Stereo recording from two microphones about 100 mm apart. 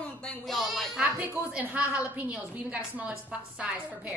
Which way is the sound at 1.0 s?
15° right (ahead or behind).